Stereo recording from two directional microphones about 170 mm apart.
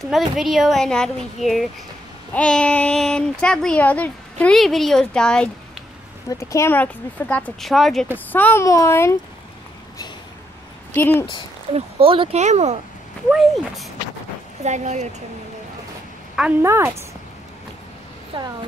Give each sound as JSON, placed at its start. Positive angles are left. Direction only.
{"t": 0.1, "sound": "a child's voice", "side_deg": 0}
{"t": 6.2, "sound": "speech", "side_deg": 20}
{"t": 11.0, "sound": "speech", "side_deg": 15}
{"t": 11.7, "sound": "speech", "side_deg": -30}
{"t": 13.3, "sound": "a child's voice", "side_deg": 0}
{"t": 14.6, "sound": "speech", "side_deg": -40}
{"t": 16.6, "sound": "a woman's voice", "side_deg": -15}
{"t": 18.3, "sound": "speech", "side_deg": -30}